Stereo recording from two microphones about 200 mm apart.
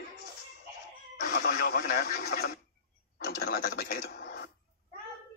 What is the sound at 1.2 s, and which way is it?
Speech, 50° left (ahead or behind).